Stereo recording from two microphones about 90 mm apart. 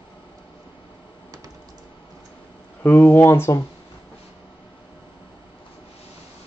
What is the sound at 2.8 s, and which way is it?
Speech, 25° left (ahead or behind).